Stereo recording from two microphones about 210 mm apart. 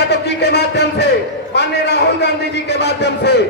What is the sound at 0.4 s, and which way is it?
Speech, 50° left (ahead or behind).